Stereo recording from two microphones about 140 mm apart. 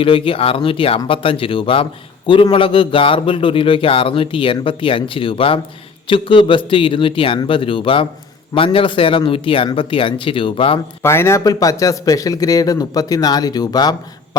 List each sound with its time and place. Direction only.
0.0 s speech: 40° left (ahead or behind)
11.0 s a man's voice: 20° left (ahead or behind)